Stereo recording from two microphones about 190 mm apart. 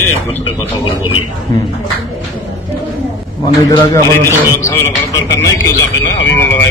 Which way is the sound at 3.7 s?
20° left (ahead or behind).